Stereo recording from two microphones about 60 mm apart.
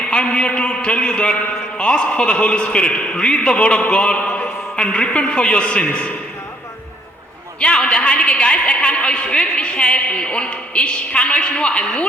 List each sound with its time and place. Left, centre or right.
0.0 s a man's voice: centre
7.6 s a woman's voice: centre